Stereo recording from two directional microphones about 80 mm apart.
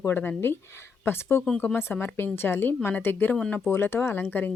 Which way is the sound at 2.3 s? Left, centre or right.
Left.